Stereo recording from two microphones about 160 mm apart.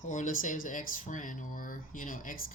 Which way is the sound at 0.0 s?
50° left (ahead or behind).